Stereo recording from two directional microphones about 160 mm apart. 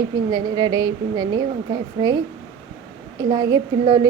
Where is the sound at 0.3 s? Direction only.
25° right (ahead or behind).